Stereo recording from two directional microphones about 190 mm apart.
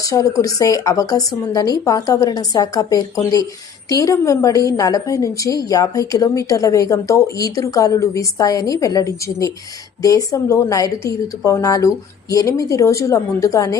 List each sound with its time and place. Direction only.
0.0 s a woman's voice: 15° left (ahead or behind)